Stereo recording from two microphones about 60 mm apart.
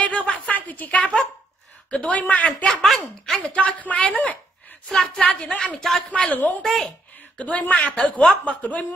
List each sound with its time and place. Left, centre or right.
0.0 s a sound: left
1.9 s a woman's voice: left
2.7 s speech: centre
3.3 s a woman's voice: centre
4.9 s speech: centre
6.1 s a woman's voice: left
6.6 s speech: centre
7.3 s a woman's voice: left